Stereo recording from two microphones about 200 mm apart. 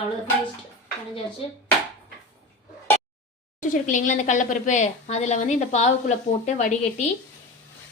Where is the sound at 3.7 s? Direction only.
40° left (ahead or behind).